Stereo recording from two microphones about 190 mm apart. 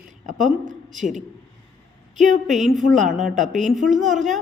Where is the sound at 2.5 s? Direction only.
40° right (ahead or behind).